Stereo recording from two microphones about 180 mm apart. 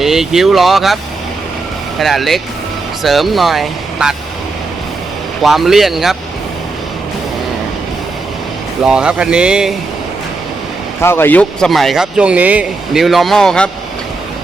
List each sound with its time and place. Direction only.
0.0 s speech: centre (ahead or behind)
2.0 s speech: centre (ahead or behind)
5.4 s speech: centre (ahead or behind)
8.8 s speech: 5° right (ahead or behind)
11.0 s speech: 15° left (ahead or behind)